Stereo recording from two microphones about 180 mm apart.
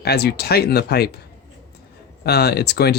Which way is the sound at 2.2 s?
65° left (ahead or behind).